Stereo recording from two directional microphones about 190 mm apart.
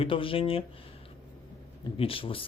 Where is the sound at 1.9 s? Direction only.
30° left (ahead or behind).